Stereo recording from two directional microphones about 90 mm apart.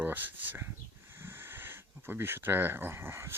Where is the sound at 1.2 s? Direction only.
25° right (ahead or behind).